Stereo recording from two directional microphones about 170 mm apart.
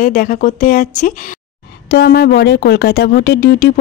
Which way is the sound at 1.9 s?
70° left (ahead or behind).